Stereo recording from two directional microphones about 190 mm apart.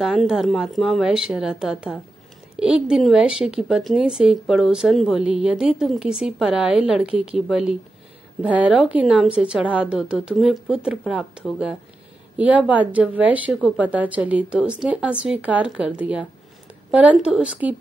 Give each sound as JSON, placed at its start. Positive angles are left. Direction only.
{"t": 0.0, "sound": "a woman's voice", "side_deg": -5}